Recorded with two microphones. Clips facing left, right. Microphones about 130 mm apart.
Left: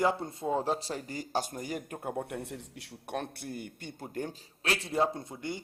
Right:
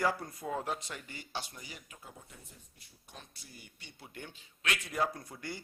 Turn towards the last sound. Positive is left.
turn(degrees=20)  # may be behind; listen again after turning